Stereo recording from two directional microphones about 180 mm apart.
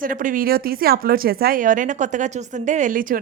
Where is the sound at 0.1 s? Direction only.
50° right (ahead or behind).